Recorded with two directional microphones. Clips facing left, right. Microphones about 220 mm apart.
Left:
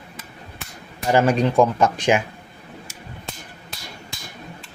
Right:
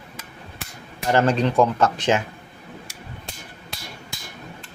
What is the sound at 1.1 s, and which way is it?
Speech, 10° left (ahead or behind).